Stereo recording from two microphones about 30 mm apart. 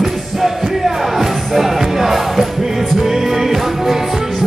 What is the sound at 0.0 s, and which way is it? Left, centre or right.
Music, centre.